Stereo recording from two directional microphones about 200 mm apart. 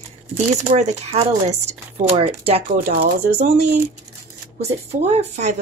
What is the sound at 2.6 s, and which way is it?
Speech, 45° right (ahead or behind).